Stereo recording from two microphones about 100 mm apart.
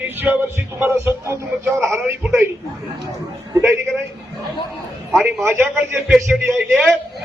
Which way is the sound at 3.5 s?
25° right (ahead or behind).